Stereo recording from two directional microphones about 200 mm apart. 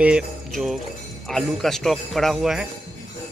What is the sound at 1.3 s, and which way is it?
A man's voice, centre (ahead or behind).